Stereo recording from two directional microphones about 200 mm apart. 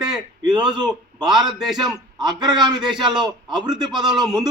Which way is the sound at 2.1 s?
20° right (ahead or behind).